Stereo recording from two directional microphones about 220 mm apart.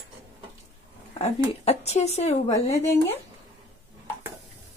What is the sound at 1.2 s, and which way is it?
A woman's voice, 30° left (ahead or behind).